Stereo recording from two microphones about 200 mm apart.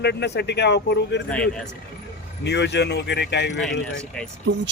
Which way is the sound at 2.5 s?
60° left (ahead or behind).